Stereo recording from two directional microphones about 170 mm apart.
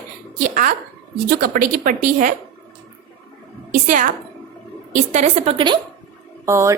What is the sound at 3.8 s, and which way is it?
A woman's voice, 50° right (ahead or behind).